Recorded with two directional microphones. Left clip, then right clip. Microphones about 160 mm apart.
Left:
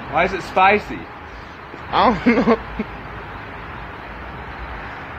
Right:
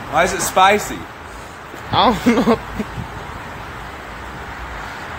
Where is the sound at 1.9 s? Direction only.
25° right (ahead or behind).